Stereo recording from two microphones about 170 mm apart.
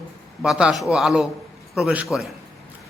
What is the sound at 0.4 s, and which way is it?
A man's voice, centre (ahead or behind).